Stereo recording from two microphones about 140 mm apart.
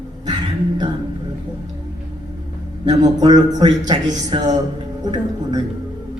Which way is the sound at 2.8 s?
30° right (ahead or behind).